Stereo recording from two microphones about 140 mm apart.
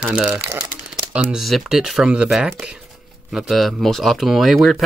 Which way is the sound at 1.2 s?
Centre (ahead or behind).